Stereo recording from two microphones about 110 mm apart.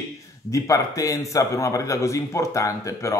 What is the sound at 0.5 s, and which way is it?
Speech, 30° left (ahead or behind).